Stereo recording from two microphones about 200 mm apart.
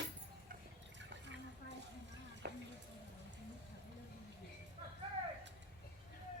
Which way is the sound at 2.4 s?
50° right (ahead or behind).